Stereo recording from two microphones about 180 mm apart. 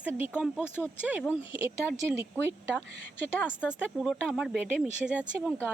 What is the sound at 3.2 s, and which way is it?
Speech, 10° left (ahead or behind).